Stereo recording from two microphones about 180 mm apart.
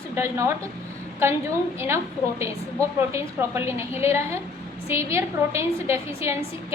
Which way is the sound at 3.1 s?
15° right (ahead or behind).